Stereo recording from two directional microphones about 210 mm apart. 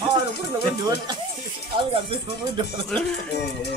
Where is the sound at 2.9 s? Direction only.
5° left (ahead or behind).